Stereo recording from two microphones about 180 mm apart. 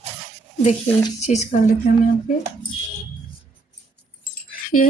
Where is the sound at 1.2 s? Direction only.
40° left (ahead or behind).